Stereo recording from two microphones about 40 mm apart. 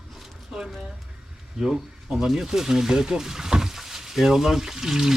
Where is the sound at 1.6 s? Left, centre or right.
Centre.